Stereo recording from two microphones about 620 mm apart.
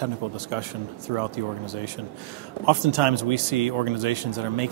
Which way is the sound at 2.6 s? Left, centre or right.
Right.